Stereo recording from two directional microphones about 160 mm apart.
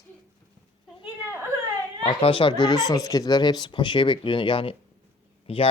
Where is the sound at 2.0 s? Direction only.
35° left (ahead or behind).